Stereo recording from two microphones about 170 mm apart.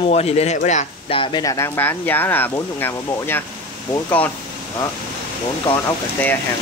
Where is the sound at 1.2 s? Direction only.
25° left (ahead or behind); by 4.3 s 10° left (ahead or behind).